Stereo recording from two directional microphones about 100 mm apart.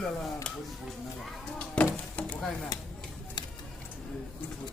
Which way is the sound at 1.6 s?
15° left (ahead or behind).